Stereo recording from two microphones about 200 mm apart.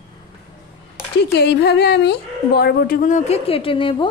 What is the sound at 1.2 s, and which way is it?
Speech, 55° left (ahead or behind).